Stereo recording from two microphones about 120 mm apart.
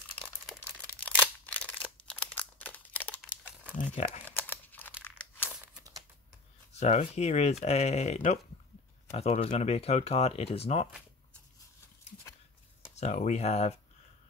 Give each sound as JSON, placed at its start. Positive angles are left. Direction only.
{"t": 0.9, "sound": "scissors", "side_deg": 10}
{"t": 1.8, "sound": "a sound", "side_deg": 10}
{"t": 3.7, "sound": "speech", "side_deg": 85}
{"t": 4.4, "sound": "crumpling", "side_deg": 15}
{"t": 6.7, "sound": "speech", "side_deg": 65}
{"t": 12.9, "sound": "speech", "side_deg": 70}